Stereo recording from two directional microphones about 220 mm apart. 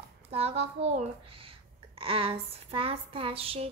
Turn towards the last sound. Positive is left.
turn(degrees=-25)  # may be behind; listen again after turning